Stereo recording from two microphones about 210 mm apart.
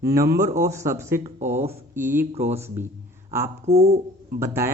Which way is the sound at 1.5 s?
30° right (ahead or behind).